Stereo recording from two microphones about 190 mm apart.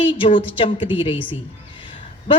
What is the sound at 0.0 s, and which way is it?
A man's voice, 25° left (ahead or behind).